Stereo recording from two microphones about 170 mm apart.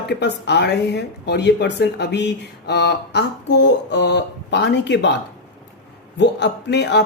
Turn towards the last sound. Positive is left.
turn(degrees=85)